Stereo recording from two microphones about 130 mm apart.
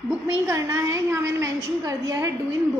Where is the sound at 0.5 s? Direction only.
20° right (ahead or behind).